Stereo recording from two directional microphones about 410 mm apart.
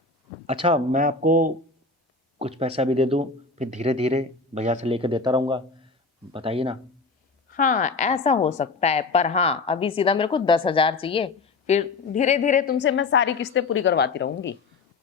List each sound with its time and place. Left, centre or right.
0.4 s speech: centre
7.5 s a woman's voice: centre